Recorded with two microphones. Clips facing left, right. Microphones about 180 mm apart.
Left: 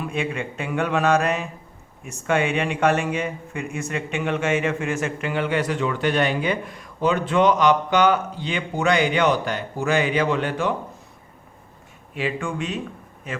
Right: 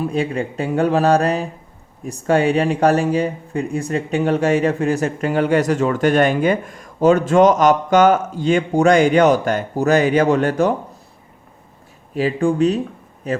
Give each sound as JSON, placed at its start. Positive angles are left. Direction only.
{"t": 0.0, "sound": "speech", "side_deg": -35}
{"t": 12.1, "sound": "speech", "side_deg": -35}